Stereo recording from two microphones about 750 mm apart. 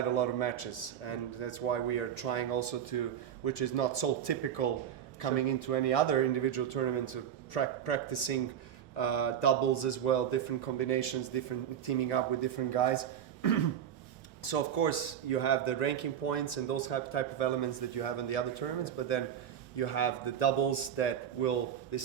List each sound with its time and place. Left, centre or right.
0.1 s a man's voice: left